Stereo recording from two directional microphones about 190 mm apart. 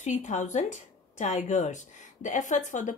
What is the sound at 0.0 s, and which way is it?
A woman's voice, 40° left (ahead or behind).